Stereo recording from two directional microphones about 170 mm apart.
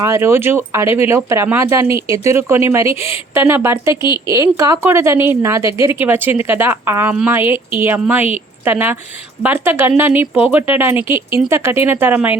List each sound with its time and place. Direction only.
0.0 s speech: 15° right (ahead or behind)